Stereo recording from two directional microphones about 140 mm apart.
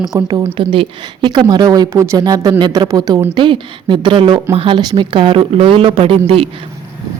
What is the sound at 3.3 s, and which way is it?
Speech, 35° right (ahead or behind).